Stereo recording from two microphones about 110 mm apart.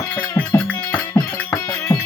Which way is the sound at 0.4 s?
20° left (ahead or behind).